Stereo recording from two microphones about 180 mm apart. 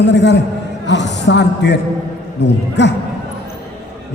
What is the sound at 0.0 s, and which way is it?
Speech, 75° left (ahead or behind).